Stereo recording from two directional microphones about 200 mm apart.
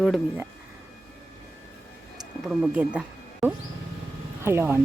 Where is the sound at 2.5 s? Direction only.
5° right (ahead or behind).